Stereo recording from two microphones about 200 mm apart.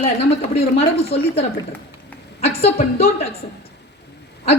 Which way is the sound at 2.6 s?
30° left (ahead or behind).